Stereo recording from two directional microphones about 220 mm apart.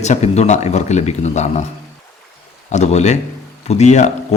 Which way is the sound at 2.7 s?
30° left (ahead or behind).